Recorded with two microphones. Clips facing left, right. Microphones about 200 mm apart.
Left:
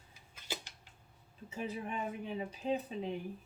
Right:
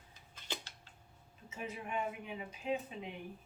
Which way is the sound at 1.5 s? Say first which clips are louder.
Left 4 dB; 35° left (ahead or behind).